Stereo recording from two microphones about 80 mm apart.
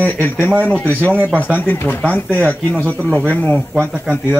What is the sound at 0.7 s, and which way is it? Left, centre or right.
Speech, left.